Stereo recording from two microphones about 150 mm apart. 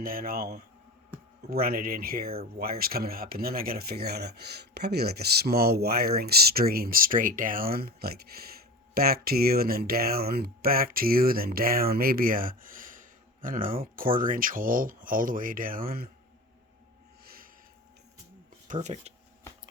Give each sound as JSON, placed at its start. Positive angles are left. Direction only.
{"t": 0.0, "sound": "speech", "side_deg": -75}
{"t": 17.2, "sound": "a sound", "side_deg": -75}
{"t": 18.7, "sound": "speech", "side_deg": -50}